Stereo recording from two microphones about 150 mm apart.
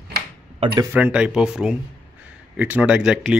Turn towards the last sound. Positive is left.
turn(degrees=-5)  # may be behind; listen again after turning